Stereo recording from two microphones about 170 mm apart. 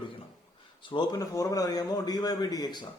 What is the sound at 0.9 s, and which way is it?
A man's voice, 25° left (ahead or behind).